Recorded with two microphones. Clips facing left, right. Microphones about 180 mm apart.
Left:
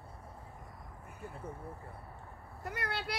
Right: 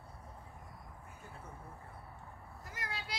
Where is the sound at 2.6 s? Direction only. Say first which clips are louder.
Left 8 dB; 65° left (ahead or behind).